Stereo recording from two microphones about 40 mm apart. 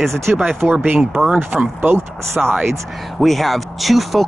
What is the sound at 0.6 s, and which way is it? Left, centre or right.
Speech, right.